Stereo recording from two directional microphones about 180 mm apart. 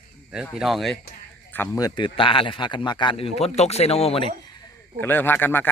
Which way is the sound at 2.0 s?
30° left (ahead or behind).